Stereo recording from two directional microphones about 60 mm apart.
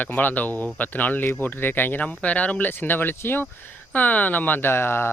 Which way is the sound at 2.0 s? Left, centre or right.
Left.